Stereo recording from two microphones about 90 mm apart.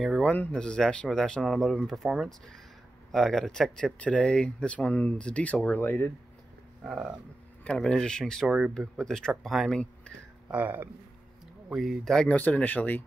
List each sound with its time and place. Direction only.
0.2 s speech: 15° left (ahead or behind)
2.0 s speech: 5° right (ahead or behind)
3.1 s speech: 5° left (ahead or behind); by 6.0 s 20° left (ahead or behind)
6.8 s a sound: 10° right (ahead or behind)
7.6 s speech: 10° left (ahead or behind)
8.5 s speech: 10° right (ahead or behind)
8.7 s speech: 5° left (ahead or behind)
10.5 s speech: 20° right (ahead or behind)
11.7 s speech: centre (ahead or behind)
12.3 s speech: 15° left (ahead or behind)